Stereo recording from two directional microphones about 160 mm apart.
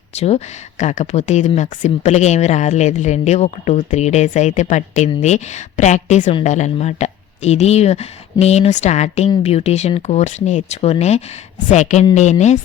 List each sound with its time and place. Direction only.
0.2 s speech: 45° left (ahead or behind)